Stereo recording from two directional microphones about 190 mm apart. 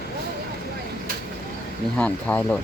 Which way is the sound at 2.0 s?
10° left (ahead or behind).